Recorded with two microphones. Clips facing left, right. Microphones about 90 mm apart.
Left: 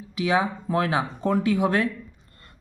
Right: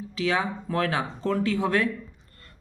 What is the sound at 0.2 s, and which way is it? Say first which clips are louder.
Speech: left 3 dB; 15° left (ahead or behind).